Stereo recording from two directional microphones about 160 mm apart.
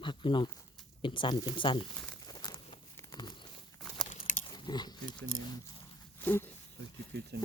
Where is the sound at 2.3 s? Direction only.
25° left (ahead or behind).